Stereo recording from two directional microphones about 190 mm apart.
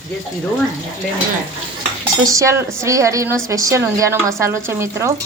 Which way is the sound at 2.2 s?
15° right (ahead or behind).